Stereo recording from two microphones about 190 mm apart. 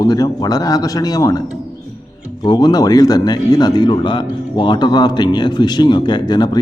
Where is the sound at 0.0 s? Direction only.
20° left (ahead or behind).